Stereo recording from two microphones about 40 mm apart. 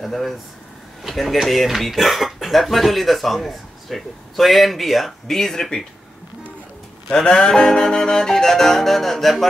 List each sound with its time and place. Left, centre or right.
0.0 s speech: centre
5.4 s music: centre
7.1 s music: centre